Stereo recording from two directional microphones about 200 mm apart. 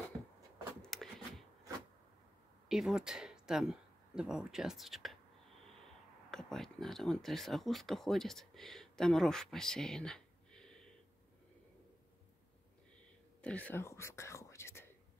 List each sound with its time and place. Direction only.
0.8 s a sound: centre (ahead or behind)
2.7 s speech: 5° right (ahead or behind)
6.3 s speech: centre (ahead or behind)
13.4 s speech: 5° left (ahead or behind)